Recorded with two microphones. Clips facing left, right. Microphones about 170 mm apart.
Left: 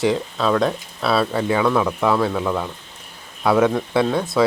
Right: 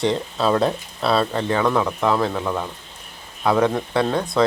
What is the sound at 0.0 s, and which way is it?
Speech, centre (ahead or behind).